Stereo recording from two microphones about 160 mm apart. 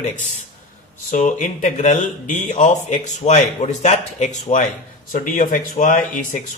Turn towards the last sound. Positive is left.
turn(degrees=55)  # may be behind; listen again after turning